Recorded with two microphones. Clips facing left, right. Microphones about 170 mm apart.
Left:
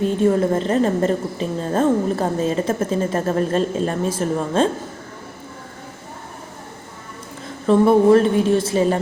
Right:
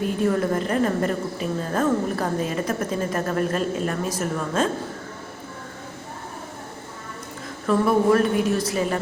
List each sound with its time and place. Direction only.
0.0 s a woman's voice: 25° left (ahead or behind)
7.7 s a woman's voice: 25° left (ahead or behind)